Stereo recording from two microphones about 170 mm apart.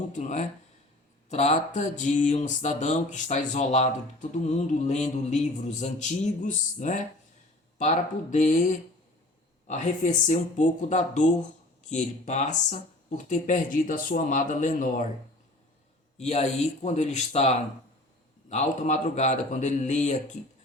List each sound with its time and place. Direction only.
0.1 s speech: 45° left (ahead or behind)
16.1 s speech: 40° left (ahead or behind)